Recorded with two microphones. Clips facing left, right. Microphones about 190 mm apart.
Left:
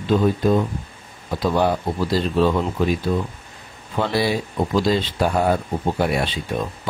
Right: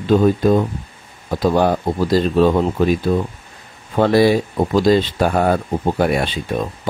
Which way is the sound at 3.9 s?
50° right (ahead or behind).